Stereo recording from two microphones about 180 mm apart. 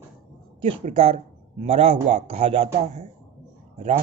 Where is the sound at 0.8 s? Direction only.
35° right (ahead or behind).